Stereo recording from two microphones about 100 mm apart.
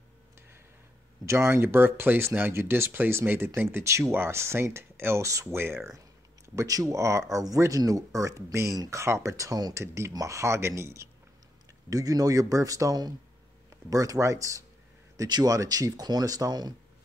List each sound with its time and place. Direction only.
1.2 s speech: 30° right (ahead or behind)